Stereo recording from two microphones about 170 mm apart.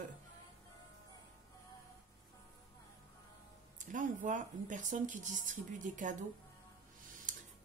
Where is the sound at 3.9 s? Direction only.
50° right (ahead or behind).